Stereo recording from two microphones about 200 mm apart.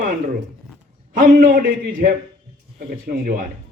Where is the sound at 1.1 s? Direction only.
45° right (ahead or behind).